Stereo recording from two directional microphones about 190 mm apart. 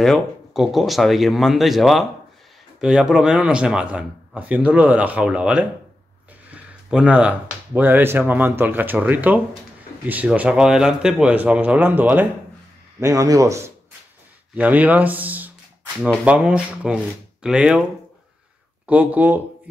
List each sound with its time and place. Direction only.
0.0 s a man's voice: centre (ahead or behind)
18.9 s speech: 10° right (ahead or behind)